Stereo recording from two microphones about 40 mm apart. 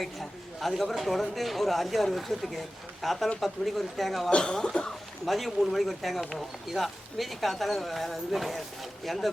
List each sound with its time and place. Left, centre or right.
0.0 s speech: centre
4.3 s speech: left
5.2 s speech: centre